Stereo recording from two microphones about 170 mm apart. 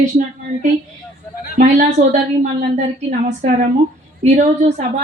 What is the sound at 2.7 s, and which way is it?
A woman's voice, 45° right (ahead or behind).